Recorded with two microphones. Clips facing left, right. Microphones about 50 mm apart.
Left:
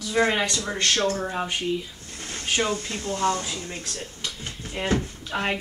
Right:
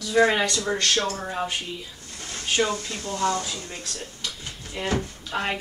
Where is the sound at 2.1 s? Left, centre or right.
Left.